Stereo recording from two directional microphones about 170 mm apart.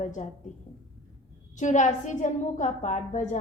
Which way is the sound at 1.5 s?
45° left (ahead or behind).